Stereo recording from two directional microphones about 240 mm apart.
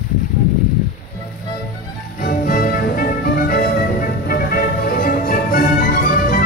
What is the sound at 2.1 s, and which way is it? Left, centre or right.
Music, left.